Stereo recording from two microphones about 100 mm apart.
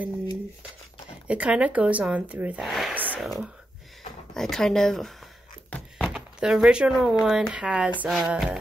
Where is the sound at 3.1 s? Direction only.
Centre (ahead or behind).